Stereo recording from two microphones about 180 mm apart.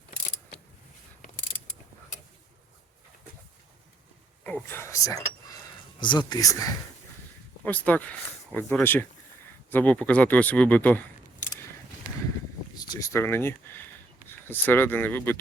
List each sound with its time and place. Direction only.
4.4 s a man's voice: 10° left (ahead or behind)
7.6 s a man's voice: 10° left (ahead or behind)
12.9 s a man's voice: 15° left (ahead or behind)